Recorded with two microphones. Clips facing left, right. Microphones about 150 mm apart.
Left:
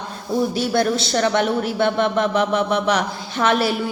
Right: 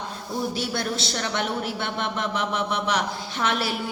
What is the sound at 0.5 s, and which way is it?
A man's voice, 50° left (ahead or behind).